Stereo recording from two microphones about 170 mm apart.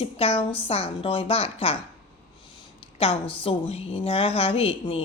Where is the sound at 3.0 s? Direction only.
30° left (ahead or behind).